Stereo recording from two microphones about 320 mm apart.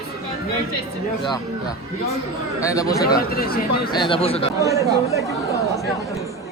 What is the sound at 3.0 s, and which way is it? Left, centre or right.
Speech, left.